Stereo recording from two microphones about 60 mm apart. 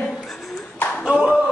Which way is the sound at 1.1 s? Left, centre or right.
Centre.